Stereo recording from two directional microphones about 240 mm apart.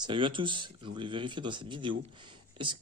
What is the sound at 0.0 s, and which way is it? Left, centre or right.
Speech, centre.